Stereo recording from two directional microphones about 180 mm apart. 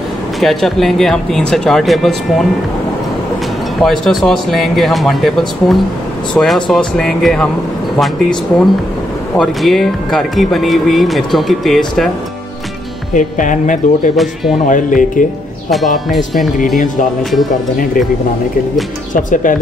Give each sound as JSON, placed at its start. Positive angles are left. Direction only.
{"t": 0.4, "sound": "speech", "side_deg": 0}
{"t": 3.8, "sound": "speech", "side_deg": 0}
{"t": 13.1, "sound": "speech", "side_deg": 45}
{"t": 14.1, "sound": "speech", "side_deg": 0}
{"t": 14.7, "sound": "speech", "side_deg": 45}
{"t": 15.7, "sound": "speech", "side_deg": 0}
{"t": 19.1, "sound": "speech", "side_deg": 50}